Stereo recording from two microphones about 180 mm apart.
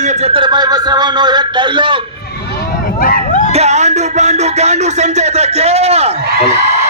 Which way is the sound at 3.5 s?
40° right (ahead or behind).